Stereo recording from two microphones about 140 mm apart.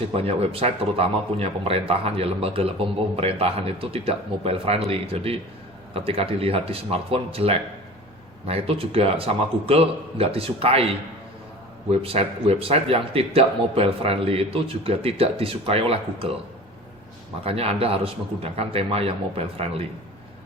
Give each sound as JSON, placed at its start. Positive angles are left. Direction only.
{"t": 0.1, "sound": "speech", "side_deg": -45}
{"t": 17.4, "sound": "speech", "side_deg": -45}